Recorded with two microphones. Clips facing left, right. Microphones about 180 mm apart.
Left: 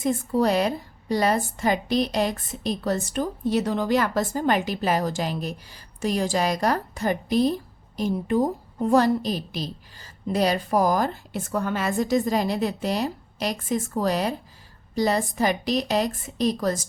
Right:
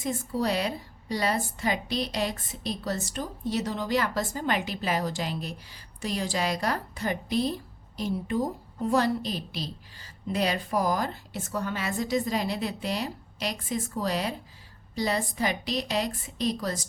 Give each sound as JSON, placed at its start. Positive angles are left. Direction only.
{"t": 0.0, "sound": "a woman's voice", "side_deg": 50}